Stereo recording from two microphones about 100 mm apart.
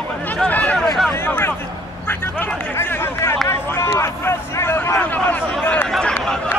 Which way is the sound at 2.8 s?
25° left (ahead or behind).